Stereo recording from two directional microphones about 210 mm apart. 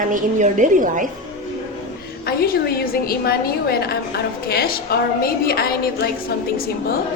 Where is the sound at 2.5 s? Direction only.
45° left (ahead or behind).